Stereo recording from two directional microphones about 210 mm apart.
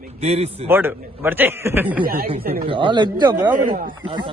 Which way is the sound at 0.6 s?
10° right (ahead or behind).